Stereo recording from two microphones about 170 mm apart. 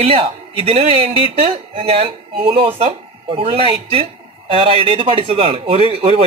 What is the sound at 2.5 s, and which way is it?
Speech, 35° right (ahead or behind).